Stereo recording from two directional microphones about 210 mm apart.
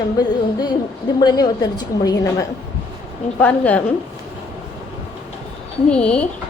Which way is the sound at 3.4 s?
5° left (ahead or behind).